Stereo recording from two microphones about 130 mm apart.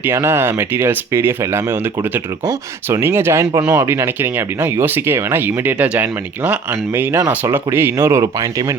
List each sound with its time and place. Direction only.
0.0 s speech: 20° right (ahead or behind)